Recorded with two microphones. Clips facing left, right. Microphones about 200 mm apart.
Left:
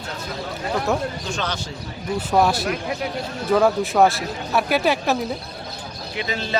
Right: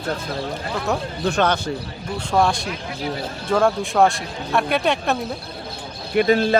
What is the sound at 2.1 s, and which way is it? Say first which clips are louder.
Speech: left 1 dB; 5° left (ahead or behind).